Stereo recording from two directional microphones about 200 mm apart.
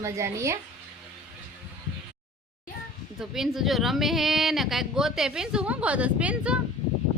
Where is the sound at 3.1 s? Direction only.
Centre (ahead or behind).